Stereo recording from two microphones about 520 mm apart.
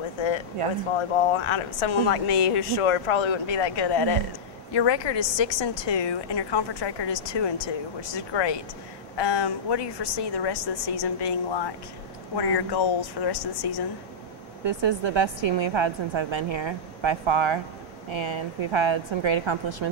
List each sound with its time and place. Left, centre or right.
0.9 s a woman's voice: left
14.6 s a woman's voice: right